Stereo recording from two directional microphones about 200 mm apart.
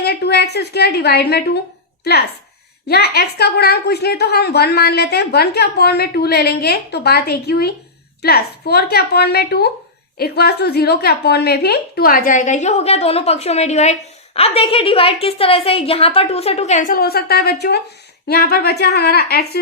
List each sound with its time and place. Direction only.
0.0 s a woman's voice: 55° left (ahead or behind)
2.8 s a woman's voice: 50° left (ahead or behind)